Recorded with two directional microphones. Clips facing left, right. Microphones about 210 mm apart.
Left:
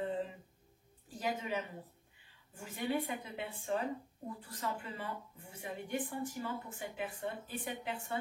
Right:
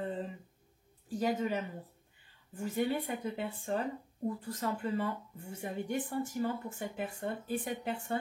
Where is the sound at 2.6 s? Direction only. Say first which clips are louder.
Right 4 dB; 40° right (ahead or behind).